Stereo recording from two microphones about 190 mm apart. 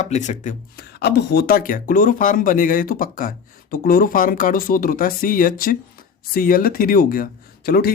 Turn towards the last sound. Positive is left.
turn(degrees=55)  # may be behind; listen again after turning